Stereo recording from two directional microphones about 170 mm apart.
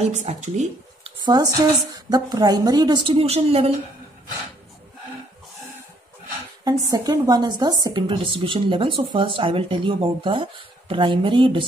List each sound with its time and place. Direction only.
0.0 s speech: 45° right (ahead or behind)
1.2 s a woman's voice: 25° right (ahead or behind)
6.6 s a woman's voice: 20° right (ahead or behind)